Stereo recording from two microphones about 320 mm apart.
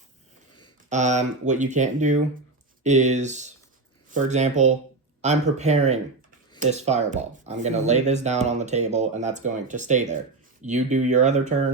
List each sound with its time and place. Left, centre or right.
0.9 s speech: right